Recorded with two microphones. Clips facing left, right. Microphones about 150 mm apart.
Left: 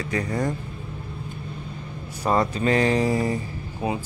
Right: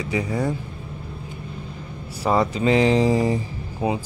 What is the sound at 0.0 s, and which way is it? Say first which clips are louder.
Speech: right 2 dB; 10° right (ahead or behind).